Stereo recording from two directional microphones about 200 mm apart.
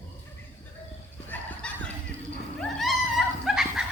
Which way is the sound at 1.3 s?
5° left (ahead or behind).